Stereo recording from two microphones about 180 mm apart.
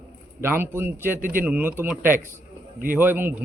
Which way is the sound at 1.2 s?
50° right (ahead or behind).